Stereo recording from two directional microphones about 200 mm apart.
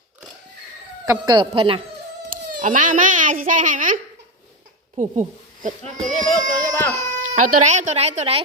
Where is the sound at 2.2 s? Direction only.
40° right (ahead or behind).